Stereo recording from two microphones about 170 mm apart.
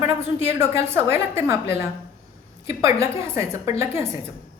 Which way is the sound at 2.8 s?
15° right (ahead or behind).